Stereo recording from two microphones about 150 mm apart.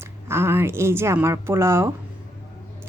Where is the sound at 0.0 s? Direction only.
15° right (ahead or behind).